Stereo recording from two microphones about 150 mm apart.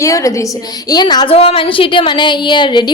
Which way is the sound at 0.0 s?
20° left (ahead or behind).